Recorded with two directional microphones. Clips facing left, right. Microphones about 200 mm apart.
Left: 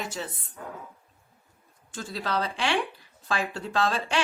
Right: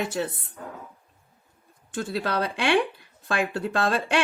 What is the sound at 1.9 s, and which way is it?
A woman's voice, 60° right (ahead or behind).